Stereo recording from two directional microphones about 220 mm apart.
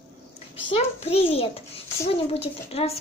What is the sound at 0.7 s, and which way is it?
Speech, 25° left (ahead or behind).